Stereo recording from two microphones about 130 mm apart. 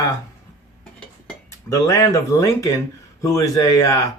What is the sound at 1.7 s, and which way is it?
Speech, 25° left (ahead or behind).